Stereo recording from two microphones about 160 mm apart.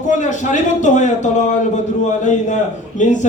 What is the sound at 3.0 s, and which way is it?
Speech, 50° left (ahead or behind).